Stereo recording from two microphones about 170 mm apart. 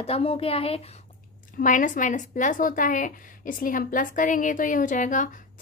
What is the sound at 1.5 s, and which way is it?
A woman's voice, 50° left (ahead or behind).